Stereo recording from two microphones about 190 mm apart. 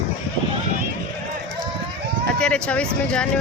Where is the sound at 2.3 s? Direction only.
5° left (ahead or behind).